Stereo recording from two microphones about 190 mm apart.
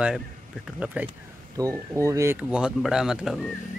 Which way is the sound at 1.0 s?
15° right (ahead or behind).